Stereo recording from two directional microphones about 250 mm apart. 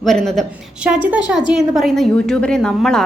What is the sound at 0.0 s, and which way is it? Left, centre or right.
A woman's voice, centre.